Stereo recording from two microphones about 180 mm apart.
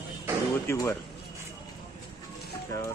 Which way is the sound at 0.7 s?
15° left (ahead or behind).